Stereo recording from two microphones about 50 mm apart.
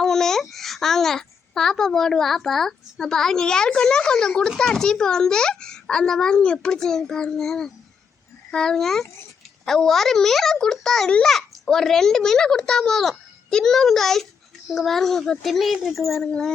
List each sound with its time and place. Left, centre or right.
0.0 s babbling: centre
0.5 s a child's voice: centre
16.2 s a child's voice: centre